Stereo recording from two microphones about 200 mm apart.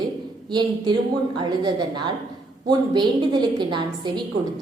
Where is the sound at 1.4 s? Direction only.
20° right (ahead or behind).